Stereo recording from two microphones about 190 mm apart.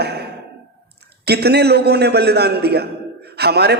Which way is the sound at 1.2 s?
60° right (ahead or behind).